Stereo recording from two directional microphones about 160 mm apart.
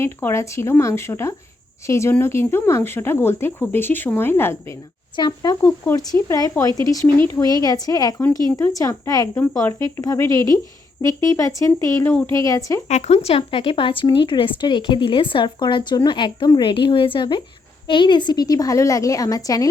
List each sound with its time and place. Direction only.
0.0 s speech: 15° left (ahead or behind)
5.1 s speech: 25° left (ahead or behind)
5.6 s speech: 15° left (ahead or behind)
12.9 s speech: 45° left (ahead or behind); by 19.6 s 20° left (ahead or behind)